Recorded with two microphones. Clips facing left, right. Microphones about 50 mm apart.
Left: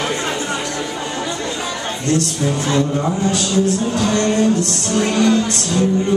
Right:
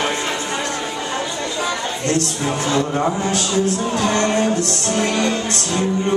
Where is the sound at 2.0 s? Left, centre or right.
Right.